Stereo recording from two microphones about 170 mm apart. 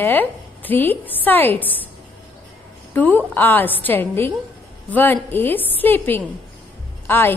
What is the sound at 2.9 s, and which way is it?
A woman's voice, 10° left (ahead or behind).